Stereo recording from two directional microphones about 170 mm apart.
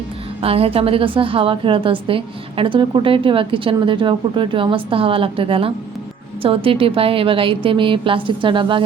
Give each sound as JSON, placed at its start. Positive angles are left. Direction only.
{"t": 0.4, "sound": "a woman's voice", "side_deg": -35}